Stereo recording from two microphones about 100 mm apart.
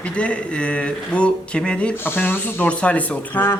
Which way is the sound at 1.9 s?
20° left (ahead or behind).